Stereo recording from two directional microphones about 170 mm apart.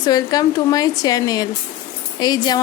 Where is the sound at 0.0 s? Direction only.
20° left (ahead or behind).